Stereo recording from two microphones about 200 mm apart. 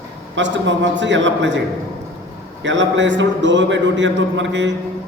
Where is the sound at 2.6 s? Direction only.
65° right (ahead or behind).